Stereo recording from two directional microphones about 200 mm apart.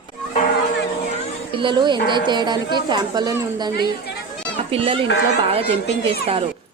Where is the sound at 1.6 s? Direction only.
25° right (ahead or behind).